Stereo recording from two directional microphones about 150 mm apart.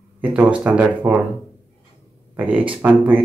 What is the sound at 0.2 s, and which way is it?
Speech, 10° right (ahead or behind).